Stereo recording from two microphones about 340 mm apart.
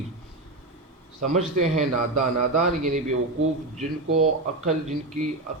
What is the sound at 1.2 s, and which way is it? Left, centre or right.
A man's voice, centre.